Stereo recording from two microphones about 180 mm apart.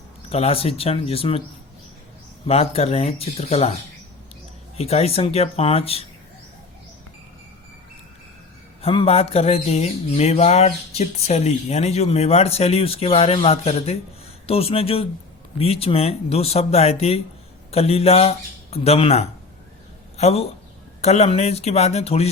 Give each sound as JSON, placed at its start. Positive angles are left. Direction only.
{"t": 0.3, "sound": "speech", "side_deg": 35}
{"t": 2.5, "sound": "speech", "side_deg": 35}
{"t": 4.8, "sound": "speech", "side_deg": 35}
{"t": 8.8, "sound": "a man's voice", "side_deg": 30}